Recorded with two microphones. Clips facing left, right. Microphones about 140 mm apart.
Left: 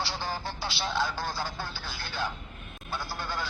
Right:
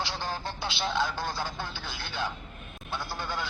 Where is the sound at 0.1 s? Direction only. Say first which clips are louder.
Even; 10° left (ahead or behind).